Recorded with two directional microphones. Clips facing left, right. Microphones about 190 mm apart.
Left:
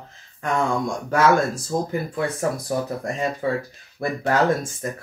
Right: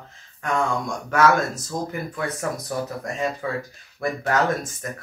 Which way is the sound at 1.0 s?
30° left (ahead or behind).